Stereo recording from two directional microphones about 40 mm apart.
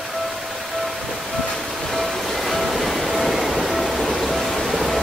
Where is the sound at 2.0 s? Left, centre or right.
Centre.